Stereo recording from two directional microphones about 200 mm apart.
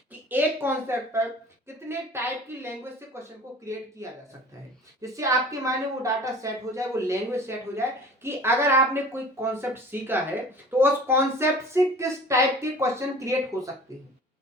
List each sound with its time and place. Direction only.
0.3 s a woman's voice: 10° right (ahead or behind)
4.0 s a woman's voice: 15° right (ahead or behind)